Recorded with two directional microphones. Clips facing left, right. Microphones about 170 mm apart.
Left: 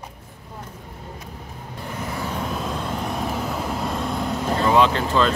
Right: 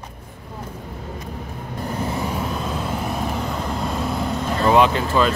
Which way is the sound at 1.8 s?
35° right (ahead or behind).